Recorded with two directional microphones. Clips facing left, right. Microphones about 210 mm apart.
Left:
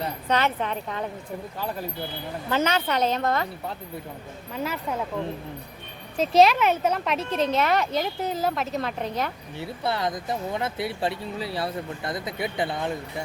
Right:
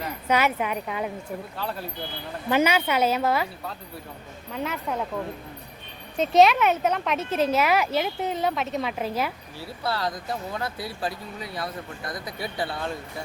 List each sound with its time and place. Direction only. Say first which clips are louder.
0.3 s speech: right 2 dB; 10° right (ahead or behind)
2.5 s speech: right 2 dB; 10° right (ahead or behind)
4.5 s speech: even; centre (ahead or behind)
6.1 s speech: even; centre (ahead or behind)
9.6 s speech: left 2 dB; 20° left (ahead or behind)